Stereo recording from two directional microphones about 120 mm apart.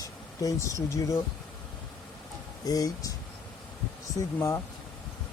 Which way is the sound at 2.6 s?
30° left (ahead or behind).